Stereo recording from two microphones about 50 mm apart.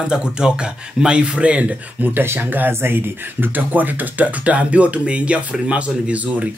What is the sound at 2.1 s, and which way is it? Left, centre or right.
Speech, right.